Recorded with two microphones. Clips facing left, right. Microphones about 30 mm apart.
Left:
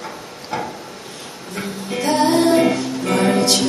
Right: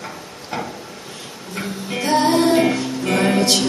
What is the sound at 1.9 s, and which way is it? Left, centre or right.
Music, centre.